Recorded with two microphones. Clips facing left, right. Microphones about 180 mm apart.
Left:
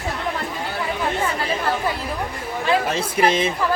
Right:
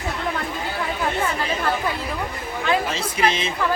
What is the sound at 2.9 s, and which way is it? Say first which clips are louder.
Speech: left 3 dB; 55° left (ahead or behind).